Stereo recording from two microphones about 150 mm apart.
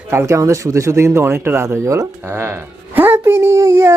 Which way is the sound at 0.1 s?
20° right (ahead or behind).